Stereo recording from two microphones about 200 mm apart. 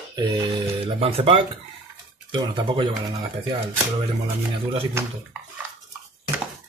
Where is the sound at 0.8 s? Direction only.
30° right (ahead or behind).